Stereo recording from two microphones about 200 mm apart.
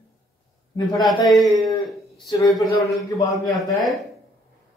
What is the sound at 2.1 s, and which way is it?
A man's voice, 20° left (ahead or behind).